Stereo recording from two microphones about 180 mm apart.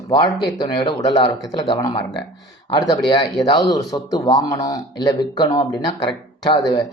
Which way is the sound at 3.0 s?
25° left (ahead or behind).